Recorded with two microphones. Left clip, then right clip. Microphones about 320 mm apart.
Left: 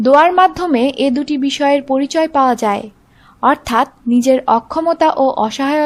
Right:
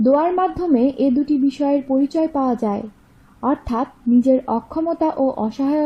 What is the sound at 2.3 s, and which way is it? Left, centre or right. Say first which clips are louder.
A woman's voice: left 8 dB; left.